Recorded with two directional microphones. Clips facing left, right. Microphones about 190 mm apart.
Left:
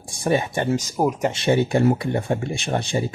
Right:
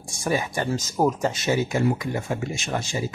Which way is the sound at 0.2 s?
25° left (ahead or behind).